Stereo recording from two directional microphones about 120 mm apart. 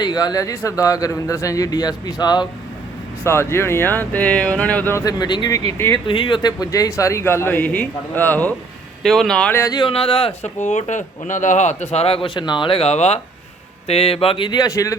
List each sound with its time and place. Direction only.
0.0 s a man's voice: 35° left (ahead or behind)
3.2 s speech: 20° left (ahead or behind)
5.0 s a man's voice: 35° left (ahead or behind)
6.1 s speech: 45° left (ahead or behind); by 8.5 s 15° left (ahead or behind)
9.0 s speech: centre (ahead or behind)
9.5 s speech: 20° left (ahead or behind)
9.7 s speech: 50° left (ahead or behind)
10.6 s a man's voice: 75° left (ahead or behind); by 14.9 s 30° left (ahead or behind)